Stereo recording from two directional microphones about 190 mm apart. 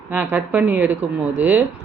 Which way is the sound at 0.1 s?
10° right (ahead or behind).